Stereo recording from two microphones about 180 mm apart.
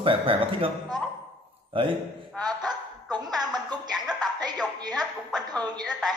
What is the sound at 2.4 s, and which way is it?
Music, 20° right (ahead or behind).